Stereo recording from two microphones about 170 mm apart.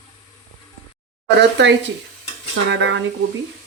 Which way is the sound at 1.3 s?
90° right.